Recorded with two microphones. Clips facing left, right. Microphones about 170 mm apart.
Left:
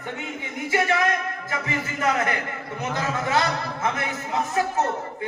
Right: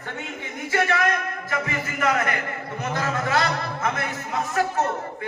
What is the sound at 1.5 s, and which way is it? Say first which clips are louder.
A man's voice: right 1 dB; 20° left (ahead or behind).